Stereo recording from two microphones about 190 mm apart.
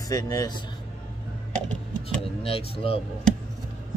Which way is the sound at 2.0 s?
30° left (ahead or behind).